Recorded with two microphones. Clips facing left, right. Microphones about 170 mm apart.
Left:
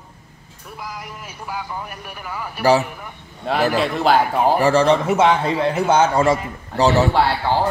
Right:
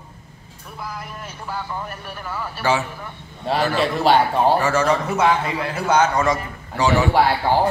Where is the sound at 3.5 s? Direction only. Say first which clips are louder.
Left 1 dB; centre (ahead or behind).